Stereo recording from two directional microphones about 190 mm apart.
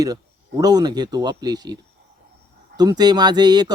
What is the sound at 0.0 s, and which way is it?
Speech, 20° right (ahead or behind).